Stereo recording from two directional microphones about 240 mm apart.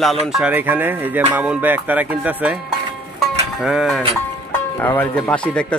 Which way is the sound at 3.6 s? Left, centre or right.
Centre.